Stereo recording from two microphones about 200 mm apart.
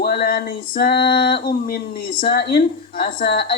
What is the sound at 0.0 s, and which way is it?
A woman's voice, 50° left (ahead or behind).